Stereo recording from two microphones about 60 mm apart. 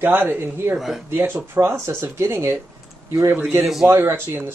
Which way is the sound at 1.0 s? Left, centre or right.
Right.